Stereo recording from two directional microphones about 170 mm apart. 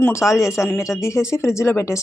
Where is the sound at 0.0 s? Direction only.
15° left (ahead or behind).